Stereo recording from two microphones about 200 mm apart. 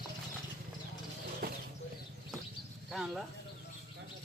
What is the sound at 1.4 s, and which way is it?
Bird, 50° right (ahead or behind).